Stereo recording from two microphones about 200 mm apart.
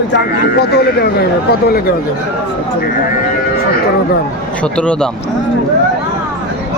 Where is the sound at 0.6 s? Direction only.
55° left (ahead or behind).